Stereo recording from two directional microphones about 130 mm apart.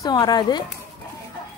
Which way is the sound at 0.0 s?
30° left (ahead or behind).